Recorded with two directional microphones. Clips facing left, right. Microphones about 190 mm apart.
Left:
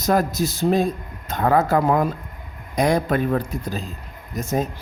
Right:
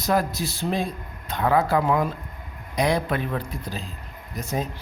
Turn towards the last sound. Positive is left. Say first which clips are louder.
# left 5 dB
turn(degrees=45)  # may be behind; listen again after turning